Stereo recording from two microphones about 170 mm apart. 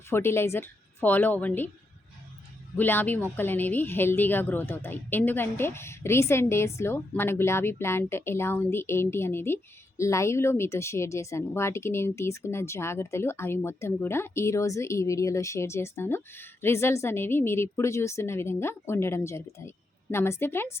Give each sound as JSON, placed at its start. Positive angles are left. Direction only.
{"t": 0.1, "sound": "speech", "side_deg": 15}
{"t": 2.7, "sound": "speech", "side_deg": 10}